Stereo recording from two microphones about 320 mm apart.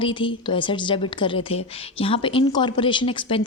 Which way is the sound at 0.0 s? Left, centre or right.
Centre.